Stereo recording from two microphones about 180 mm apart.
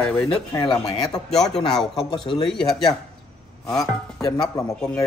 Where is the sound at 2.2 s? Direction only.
25° left (ahead or behind).